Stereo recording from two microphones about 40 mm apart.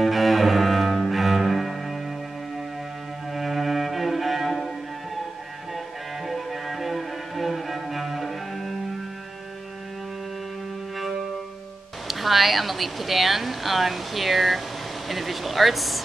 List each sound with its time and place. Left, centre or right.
0.0 s cello: centre
3.3 s music: centre
6.2 s music: centre
12.1 s speech: centre